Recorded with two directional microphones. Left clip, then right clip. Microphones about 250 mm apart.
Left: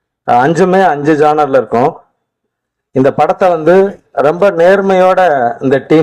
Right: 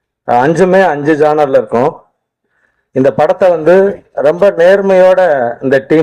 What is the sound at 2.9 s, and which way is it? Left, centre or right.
A man's voice, left.